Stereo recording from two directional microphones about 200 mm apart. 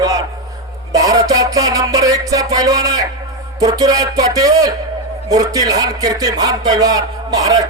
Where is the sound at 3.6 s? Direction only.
20° right (ahead or behind).